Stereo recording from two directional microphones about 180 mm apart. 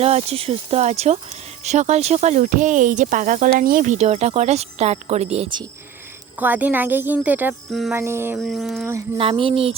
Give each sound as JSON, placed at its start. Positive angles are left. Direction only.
{"t": 0.0, "sound": "speech", "side_deg": -35}
{"t": 6.4, "sound": "a woman's voice", "side_deg": -10}
{"t": 7.7, "sound": "a sound", "side_deg": 0}
{"t": 7.9, "sound": "a woman's voice", "side_deg": -15}
{"t": 8.4, "sound": "a sound", "side_deg": 0}
{"t": 9.1, "sound": "speech", "side_deg": -30}